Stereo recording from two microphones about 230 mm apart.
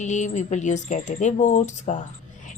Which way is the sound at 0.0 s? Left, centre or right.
Left.